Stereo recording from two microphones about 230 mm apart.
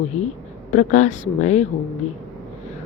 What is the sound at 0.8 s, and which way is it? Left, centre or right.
Speech, left.